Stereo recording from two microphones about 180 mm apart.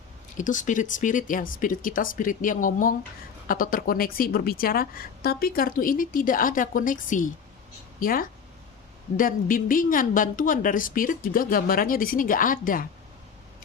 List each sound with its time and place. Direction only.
0.3 s a woman's voice: 45° left (ahead or behind)